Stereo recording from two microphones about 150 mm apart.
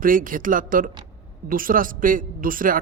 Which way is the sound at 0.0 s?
65° right (ahead or behind).